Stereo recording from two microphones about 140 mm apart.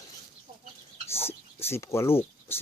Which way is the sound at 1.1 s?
15° left (ahead or behind).